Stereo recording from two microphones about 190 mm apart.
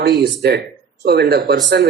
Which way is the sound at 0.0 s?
55° right (ahead or behind).